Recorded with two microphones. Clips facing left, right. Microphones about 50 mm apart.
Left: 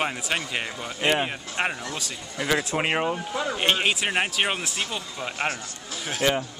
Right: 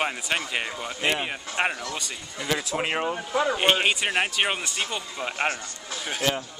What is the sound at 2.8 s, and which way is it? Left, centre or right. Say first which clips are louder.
Speech: left 2 dB; centre.